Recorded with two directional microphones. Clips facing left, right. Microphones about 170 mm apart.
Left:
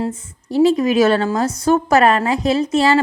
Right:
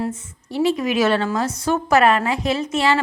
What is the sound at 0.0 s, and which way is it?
A woman's voice, 35° left (ahead or behind).